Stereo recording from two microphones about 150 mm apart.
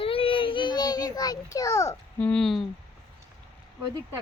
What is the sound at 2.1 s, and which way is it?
Speech, 10° left (ahead or behind).